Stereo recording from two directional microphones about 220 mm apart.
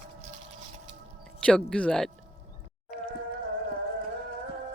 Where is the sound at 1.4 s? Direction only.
5° left (ahead or behind).